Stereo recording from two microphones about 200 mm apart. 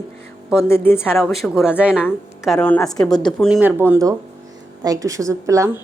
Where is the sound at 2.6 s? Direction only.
10° left (ahead or behind); by 5.6 s 15° right (ahead or behind).